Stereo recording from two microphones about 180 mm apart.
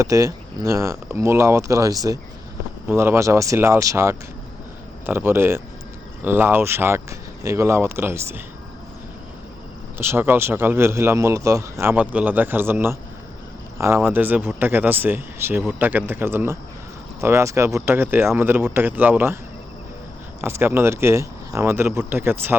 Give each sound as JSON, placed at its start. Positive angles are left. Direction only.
{"t": 0.0, "sound": "speech", "side_deg": -15}
{"t": 10.0, "sound": "speech", "side_deg": -10}
{"t": 20.4, "sound": "speech", "side_deg": -15}